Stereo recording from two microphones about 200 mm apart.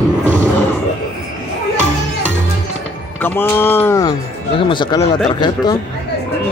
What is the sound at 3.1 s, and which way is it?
Speech, 10° left (ahead or behind).